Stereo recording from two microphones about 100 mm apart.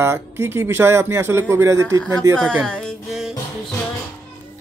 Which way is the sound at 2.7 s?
10° left (ahead or behind).